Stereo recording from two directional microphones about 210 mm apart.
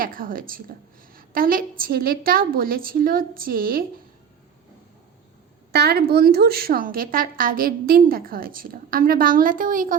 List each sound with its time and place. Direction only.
0.0 s a woman's voice: 40° right (ahead or behind)
5.7 s a woman's voice: 50° right (ahead or behind)